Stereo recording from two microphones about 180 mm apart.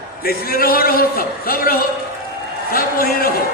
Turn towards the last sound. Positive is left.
turn(degrees=55)  # may be behind; listen again after turning